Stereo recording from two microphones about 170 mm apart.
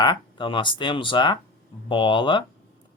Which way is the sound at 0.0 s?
25° left (ahead or behind).